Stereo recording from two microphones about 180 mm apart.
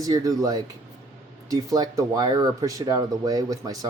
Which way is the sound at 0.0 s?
20° right (ahead or behind).